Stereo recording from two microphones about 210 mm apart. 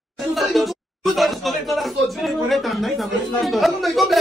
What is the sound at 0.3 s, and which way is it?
Speech, centre (ahead or behind).